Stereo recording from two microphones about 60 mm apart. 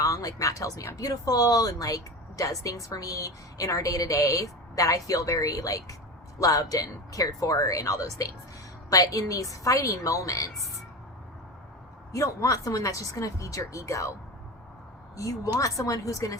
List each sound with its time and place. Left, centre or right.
0.0 s speech: left
0.9 s speech: left
6.4 s speech: left
12.1 s speech: left
15.1 s speech: left